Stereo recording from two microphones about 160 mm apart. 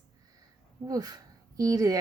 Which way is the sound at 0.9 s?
25° right (ahead or behind).